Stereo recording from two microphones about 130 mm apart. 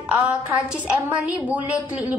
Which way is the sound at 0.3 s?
10° right (ahead or behind).